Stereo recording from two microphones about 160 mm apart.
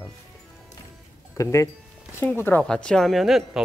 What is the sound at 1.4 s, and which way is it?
Speech, 20° left (ahead or behind).